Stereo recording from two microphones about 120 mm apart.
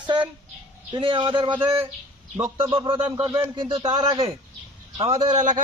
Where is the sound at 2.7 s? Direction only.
45° right (ahead or behind).